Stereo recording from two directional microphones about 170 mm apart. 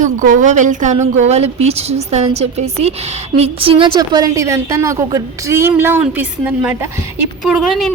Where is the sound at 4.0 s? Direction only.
20° right (ahead or behind).